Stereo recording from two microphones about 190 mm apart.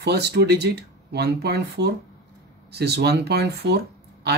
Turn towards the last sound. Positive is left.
turn(degrees=-60)  # may be behind; listen again after turning